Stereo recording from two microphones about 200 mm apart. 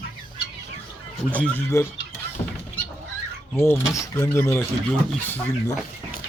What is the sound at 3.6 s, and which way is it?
Speech, 10° left (ahead or behind).